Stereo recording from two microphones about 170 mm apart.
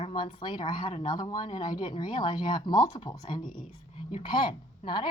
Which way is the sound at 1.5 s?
50° left (ahead or behind).